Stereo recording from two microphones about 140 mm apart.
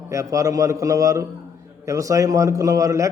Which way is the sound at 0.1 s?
25° right (ahead or behind).